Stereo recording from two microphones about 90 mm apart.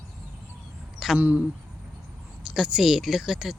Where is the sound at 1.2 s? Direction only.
20° right (ahead or behind).